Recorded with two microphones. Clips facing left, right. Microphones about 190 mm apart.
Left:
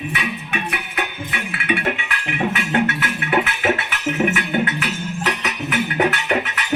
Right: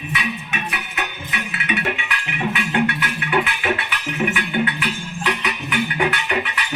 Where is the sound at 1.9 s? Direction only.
40° left (ahead or behind).